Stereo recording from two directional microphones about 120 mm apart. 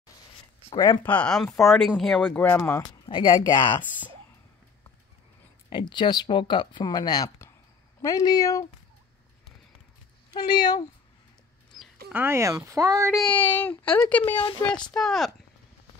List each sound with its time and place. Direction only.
0.7 s speech: 30° left (ahead or behind)
1.0 s speech: 10° left (ahead or behind)
2.2 s speech: 15° left (ahead or behind)
3.1 s speech: 45° left (ahead or behind)
5.7 s speech: 40° left (ahead or behind)
10.3 s speech: 40° left (ahead or behind)
12.1 s speech: 20° right (ahead or behind)
13.3 s speech: 15° left (ahead or behind)